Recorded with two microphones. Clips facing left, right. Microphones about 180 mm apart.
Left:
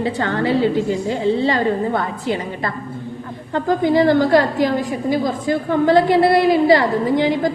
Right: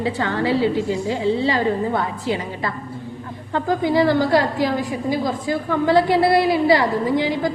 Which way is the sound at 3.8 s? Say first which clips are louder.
Left 3 dB; 50° left (ahead or behind).